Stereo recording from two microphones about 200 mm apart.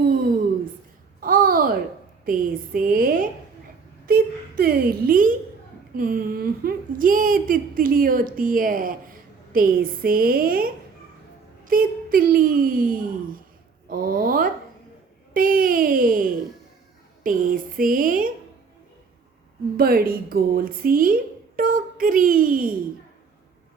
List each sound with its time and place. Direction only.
1.2 s babbling: 45° right (ahead or behind)
2.2 s speech: 45° right (ahead or behind)
4.0 s a sound: 50° right (ahead or behind)
6.0 s a woman's voice: 45° right (ahead or behind)
19.7 s speech: 45° right (ahead or behind)